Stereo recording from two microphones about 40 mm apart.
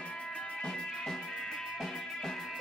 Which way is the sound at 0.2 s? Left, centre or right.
Left.